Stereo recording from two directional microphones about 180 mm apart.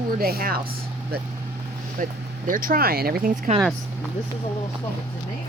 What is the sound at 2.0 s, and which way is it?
Speech, 50° right (ahead or behind).